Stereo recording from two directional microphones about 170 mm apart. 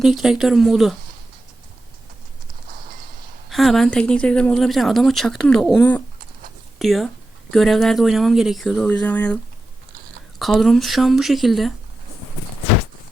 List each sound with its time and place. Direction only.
0.0 s speech: centre (ahead or behind)
3.5 s speech: centre (ahead or behind)